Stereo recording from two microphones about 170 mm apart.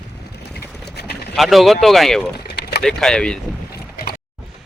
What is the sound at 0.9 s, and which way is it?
Boat, 75° left (ahead or behind).